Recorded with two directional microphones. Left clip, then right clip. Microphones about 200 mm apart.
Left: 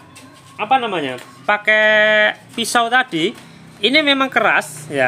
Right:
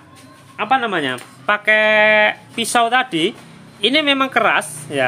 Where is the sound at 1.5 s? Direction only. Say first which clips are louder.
Left 1 dB; 5° left (ahead or behind).